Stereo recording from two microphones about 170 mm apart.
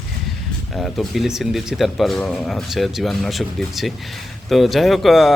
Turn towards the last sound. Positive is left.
turn(degrees=0)  # may be behind; listen again after turning